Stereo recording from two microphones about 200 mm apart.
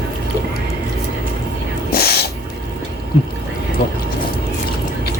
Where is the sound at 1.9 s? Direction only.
50° left (ahead or behind).